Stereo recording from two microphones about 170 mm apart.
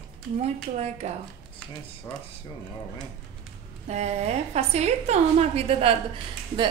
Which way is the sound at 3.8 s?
40° right (ahead or behind).